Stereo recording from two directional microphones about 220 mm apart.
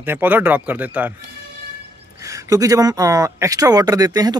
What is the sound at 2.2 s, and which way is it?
Speech, 15° right (ahead or behind).